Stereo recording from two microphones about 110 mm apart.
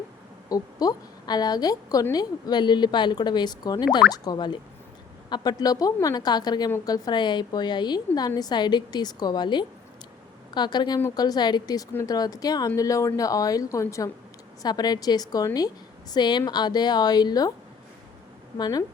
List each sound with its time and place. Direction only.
0.5 s a woman's voice: 35° left (ahead or behind)
18.5 s speech: 40° left (ahead or behind)